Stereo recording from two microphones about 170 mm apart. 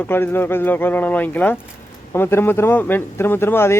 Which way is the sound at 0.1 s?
15° left (ahead or behind).